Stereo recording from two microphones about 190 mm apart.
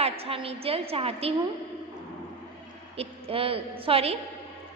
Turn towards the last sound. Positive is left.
turn(degrees=-30)  # may be behind; listen again after turning